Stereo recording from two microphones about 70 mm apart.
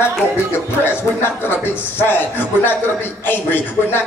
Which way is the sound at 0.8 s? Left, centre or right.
Left.